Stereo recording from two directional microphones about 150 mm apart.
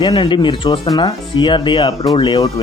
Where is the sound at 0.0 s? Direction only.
30° left (ahead or behind).